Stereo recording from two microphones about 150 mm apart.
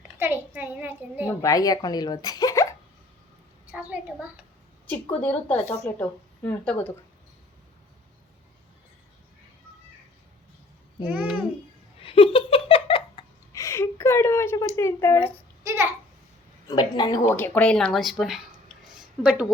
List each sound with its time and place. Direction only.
0.2 s a sound: 15° right (ahead or behind)
1.4 s speech: 25° left (ahead or behind)
3.7 s a sound: 10° right (ahead or behind)
5.2 s speech: 10° left (ahead or behind)
11.0 s a child's voice: 10° right (ahead or behind)
11.9 s giggle: 35° left (ahead or behind)
13.5 s a woman's voice: 20° left (ahead or behind)
15.6 s babbling: 15° right (ahead or behind)
16.6 s speech: 25° left (ahead or behind)
17.3 s a child's voice: 10° left (ahead or behind); by 19.5 s 5° right (ahead or behind)